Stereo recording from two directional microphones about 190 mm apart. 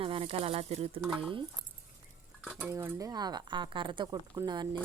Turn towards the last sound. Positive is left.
turn(degrees=-20)  # may be behind; listen again after turning